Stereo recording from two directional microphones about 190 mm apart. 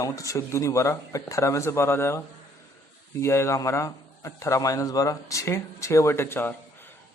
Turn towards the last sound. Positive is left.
turn(degrees=10)  # may be behind; listen again after turning